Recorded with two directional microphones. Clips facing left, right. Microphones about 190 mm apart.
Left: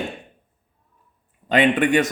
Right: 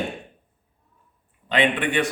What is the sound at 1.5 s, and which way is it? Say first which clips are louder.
Speech: left 5 dB; 45° left (ahead or behind).